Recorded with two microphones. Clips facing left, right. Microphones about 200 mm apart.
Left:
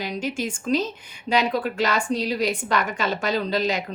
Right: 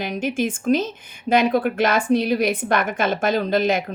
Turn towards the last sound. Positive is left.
turn(degrees=-50)  # may be behind; listen again after turning